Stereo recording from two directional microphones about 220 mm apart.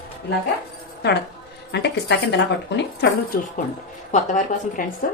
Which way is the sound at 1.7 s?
50° left (ahead or behind).